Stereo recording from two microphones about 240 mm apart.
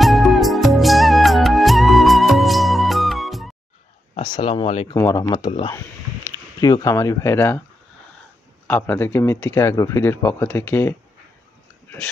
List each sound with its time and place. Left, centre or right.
0.0 s music: centre
4.1 s a man's voice: centre
8.6 s a man's voice: centre